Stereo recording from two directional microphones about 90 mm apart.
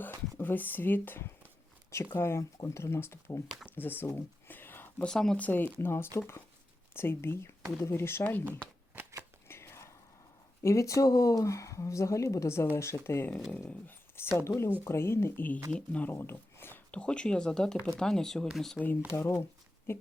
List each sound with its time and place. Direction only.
0.0 s speech: 20° left (ahead or behind)
4.4 s a sound: 20° left (ahead or behind)
5.0 s speech: 5° left (ahead or behind)
5.4 s speech: 20° left (ahead or behind)
9.5 s whispering: 30° left (ahead or behind)
10.6 s speech: 35° left (ahead or behind); by 16.1 s 15° left (ahead or behind)
16.1 s a sound: 25° left (ahead or behind)
16.9 s speech: 10° left (ahead or behind)
18.8 s speech: 25° left (ahead or behind)